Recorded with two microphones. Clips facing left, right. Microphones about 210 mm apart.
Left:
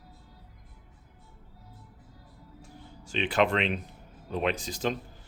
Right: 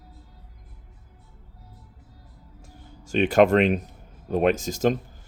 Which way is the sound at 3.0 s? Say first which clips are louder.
Right 8 dB; 45° right (ahead or behind).